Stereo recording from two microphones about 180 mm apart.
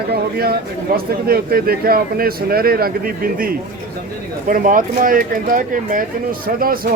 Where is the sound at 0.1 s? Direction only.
60° right (ahead or behind).